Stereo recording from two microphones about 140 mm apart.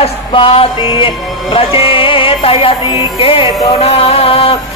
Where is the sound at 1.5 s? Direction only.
40° left (ahead or behind).